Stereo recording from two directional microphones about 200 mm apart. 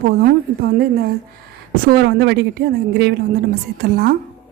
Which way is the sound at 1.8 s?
50° right (ahead or behind).